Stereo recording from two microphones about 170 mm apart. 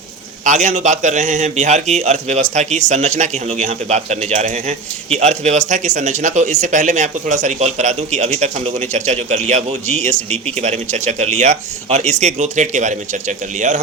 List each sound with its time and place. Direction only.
0.4 s a man's voice: 45° right (ahead or behind)